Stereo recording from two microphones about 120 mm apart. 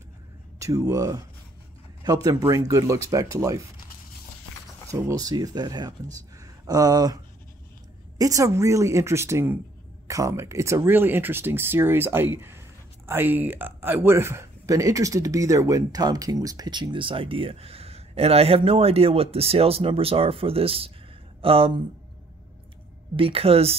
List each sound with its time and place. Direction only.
0.6 s speech: 25° right (ahead or behind)
4.8 s speech: 25° right (ahead or behind)
6.3 s a sound: 30° right (ahead or behind)
8.2 s a woman's voice: 30° right (ahead or behind); by 21.8 s 50° right (ahead or behind)
23.1 s a woman's voice: 50° right (ahead or behind)